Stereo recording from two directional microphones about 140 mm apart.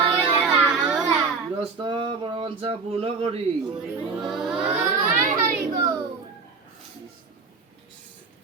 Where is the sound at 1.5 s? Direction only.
35° right (ahead or behind).